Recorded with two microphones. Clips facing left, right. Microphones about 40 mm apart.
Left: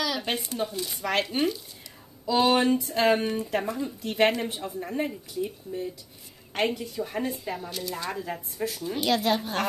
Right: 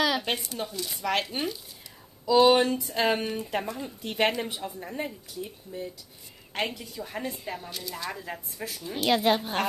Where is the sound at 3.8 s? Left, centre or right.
Centre.